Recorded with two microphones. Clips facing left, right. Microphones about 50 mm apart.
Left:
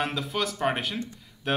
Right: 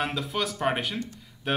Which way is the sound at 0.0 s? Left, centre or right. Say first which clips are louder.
Even; centre.